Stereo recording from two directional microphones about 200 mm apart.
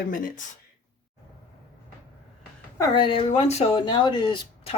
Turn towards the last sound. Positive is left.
turn(degrees=25)  # may be behind; listen again after turning